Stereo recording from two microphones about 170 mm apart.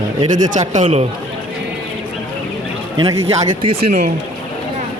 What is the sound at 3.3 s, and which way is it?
Speech, 30° right (ahead or behind).